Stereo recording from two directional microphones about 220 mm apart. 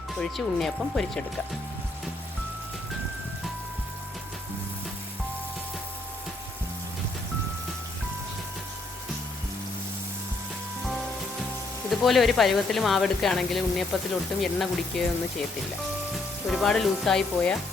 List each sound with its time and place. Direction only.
0.2 s speech: centre (ahead or behind)
11.9 s speech: centre (ahead or behind)
16.5 s speech: centre (ahead or behind)